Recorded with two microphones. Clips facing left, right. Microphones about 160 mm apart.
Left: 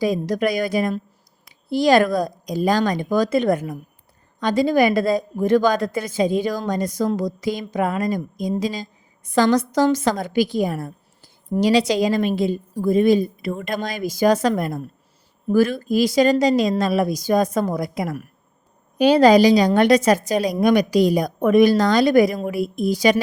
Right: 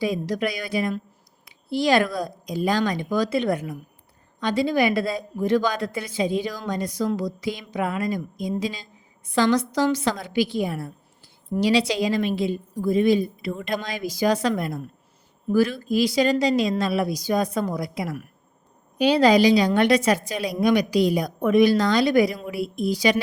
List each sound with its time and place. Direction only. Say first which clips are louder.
0.0 s a woman's voice: left 4 dB; 45° left (ahead or behind)